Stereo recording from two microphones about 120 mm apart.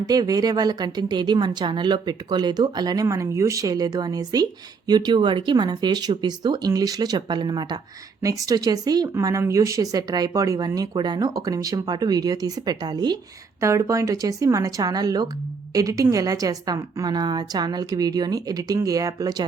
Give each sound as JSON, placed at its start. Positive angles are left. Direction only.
{"t": 0.0, "sound": "a woman's voice", "side_deg": -30}
{"t": 13.6, "sound": "a woman's voice", "side_deg": -25}